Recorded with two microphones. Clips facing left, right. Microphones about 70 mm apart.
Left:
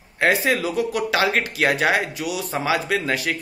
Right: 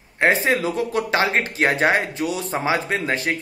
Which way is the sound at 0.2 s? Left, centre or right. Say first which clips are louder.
Right 1 dB; right.